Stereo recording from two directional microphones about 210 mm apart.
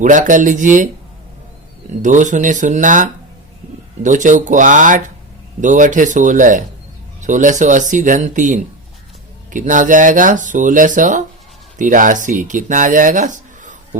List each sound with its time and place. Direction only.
0.0 s speech: 40° right (ahead or behind)
2.0 s speech: 35° right (ahead or behind)